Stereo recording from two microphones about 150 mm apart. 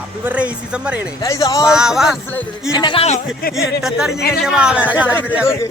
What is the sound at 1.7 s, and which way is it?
Speech, 5° right (ahead or behind).